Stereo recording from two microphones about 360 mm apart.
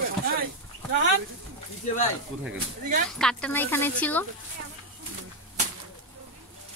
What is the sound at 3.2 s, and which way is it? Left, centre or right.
Speech, centre.